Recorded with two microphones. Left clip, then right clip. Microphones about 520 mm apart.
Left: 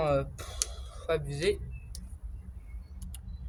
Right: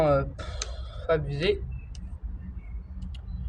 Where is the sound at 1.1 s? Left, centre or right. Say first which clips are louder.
Right 4 dB; left.